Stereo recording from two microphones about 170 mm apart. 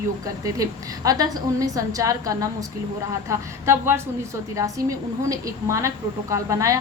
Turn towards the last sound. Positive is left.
turn(degrees=-20)  # may be behind; listen again after turning